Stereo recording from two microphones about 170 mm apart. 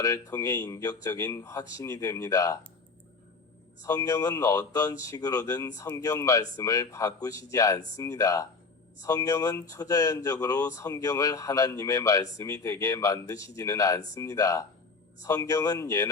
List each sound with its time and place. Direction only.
0.0 s speech: 20° left (ahead or behind)
3.8 s speech: 20° left (ahead or behind)